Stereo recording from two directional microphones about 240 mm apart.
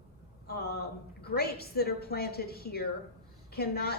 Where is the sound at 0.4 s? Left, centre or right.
Left.